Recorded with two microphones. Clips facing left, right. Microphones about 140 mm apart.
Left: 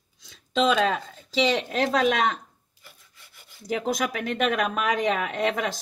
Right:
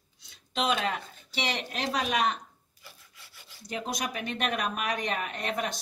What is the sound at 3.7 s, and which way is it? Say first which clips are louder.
Speech: left 7 dB; 90° left.